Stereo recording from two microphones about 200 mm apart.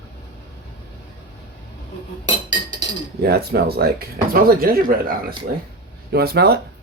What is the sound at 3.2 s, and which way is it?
Speech, 50° right (ahead or behind).